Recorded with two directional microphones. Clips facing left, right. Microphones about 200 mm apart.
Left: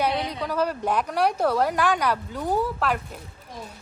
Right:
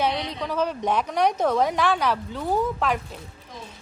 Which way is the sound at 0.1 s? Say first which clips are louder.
Left 1 dB; 10° left (ahead or behind).